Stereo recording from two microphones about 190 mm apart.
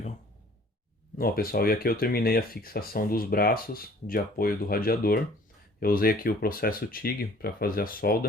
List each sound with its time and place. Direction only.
1.2 s speech: 50° left (ahead or behind)